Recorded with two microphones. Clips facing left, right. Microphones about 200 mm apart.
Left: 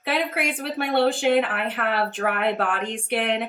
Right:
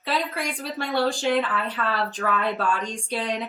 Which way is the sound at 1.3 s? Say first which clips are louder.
Left 3 dB; 60° left (ahead or behind).